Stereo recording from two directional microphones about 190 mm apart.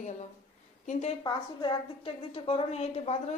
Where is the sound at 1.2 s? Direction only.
25° left (ahead or behind).